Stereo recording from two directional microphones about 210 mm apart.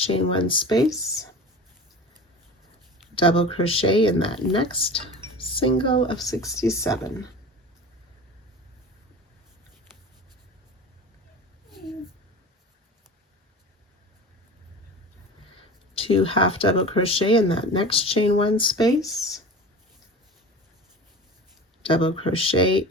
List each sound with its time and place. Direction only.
0.0 s speech: 25° left (ahead or behind)
3.2 s speech: 25° left (ahead or behind)
16.0 s speech: 25° left (ahead or behind)
21.8 s speech: 25° left (ahead or behind)